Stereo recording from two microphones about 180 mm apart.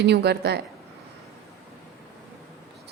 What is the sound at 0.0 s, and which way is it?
Speech, 65° right (ahead or behind).